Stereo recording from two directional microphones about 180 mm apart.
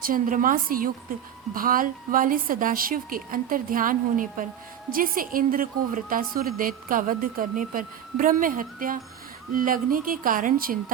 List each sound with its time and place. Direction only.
0.0 s a woman's voice: 50° right (ahead or behind)